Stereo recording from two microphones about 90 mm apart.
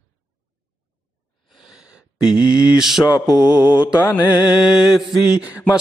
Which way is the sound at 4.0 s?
20° left (ahead or behind).